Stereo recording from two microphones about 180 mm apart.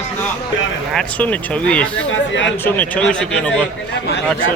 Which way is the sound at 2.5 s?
10° left (ahead or behind).